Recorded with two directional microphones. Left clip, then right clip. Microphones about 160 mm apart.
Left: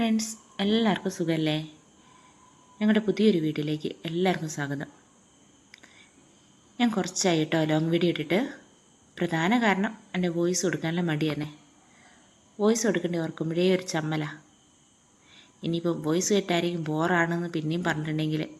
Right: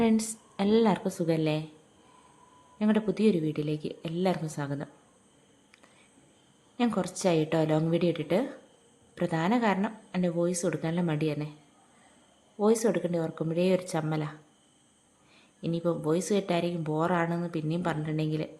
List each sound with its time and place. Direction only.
0.0 s a woman's voice: 25° right (ahead or behind)
2.7 s speech: 15° right (ahead or behind)
7.0 s speech: 15° right (ahead or behind)
12.6 s speech: 15° right (ahead or behind)
15.6 s speech: 15° right (ahead or behind)